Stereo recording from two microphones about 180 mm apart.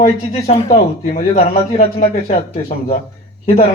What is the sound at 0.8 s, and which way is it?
Speech, 50° left (ahead or behind).